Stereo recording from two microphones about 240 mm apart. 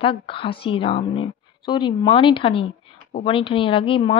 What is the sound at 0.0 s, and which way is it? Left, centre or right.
A woman's voice, left.